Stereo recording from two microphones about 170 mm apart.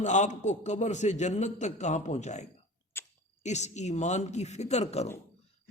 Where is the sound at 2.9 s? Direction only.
15° left (ahead or behind).